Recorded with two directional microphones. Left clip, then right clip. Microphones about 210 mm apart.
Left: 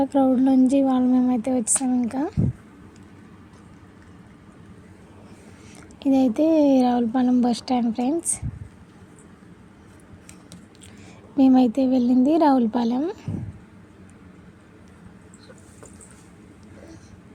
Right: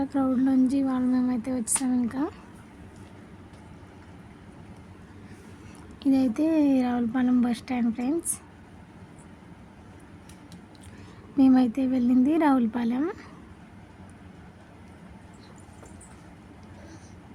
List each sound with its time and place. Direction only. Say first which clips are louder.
0.0 s speech: left 6 dB; 15° left (ahead or behind)
6.0 s speech: left 5 dB; 10° left (ahead or behind)
11.5 s speech: left 5 dB; 15° left (ahead or behind)